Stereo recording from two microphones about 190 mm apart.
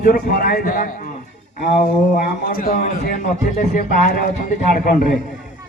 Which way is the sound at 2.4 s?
50° left (ahead or behind).